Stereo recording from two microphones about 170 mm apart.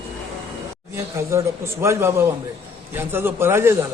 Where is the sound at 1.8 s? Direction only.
15° right (ahead or behind).